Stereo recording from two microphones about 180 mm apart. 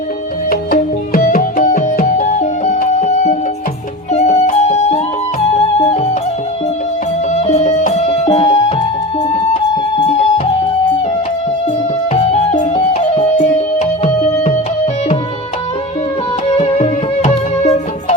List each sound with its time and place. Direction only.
0.5 s music: 55° left (ahead or behind); by 6.1 s 35° left (ahead or behind)
7.4 s music: 40° left (ahead or behind)
12.1 s music: 35° left (ahead or behind)
13.3 s music: 45° left (ahead or behind)
16.6 s music: 35° left (ahead or behind)